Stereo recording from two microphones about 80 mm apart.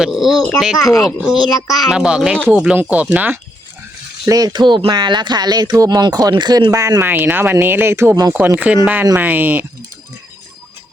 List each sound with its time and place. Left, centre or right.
0.0 s speech: centre
4.3 s speech: right
6.3 s speech: right
7.0 s speech: right